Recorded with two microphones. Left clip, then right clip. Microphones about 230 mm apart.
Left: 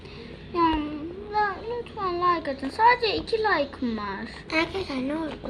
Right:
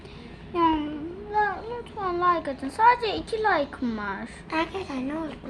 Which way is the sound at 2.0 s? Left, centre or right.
Centre.